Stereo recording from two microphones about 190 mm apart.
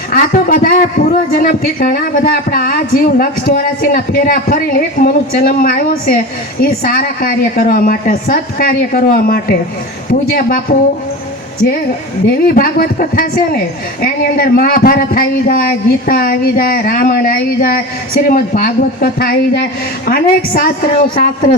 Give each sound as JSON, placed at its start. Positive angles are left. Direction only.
{"t": 0.1, "sound": "a man's voice", "side_deg": 45}
{"t": 12.5, "sound": "a man's voice", "side_deg": 50}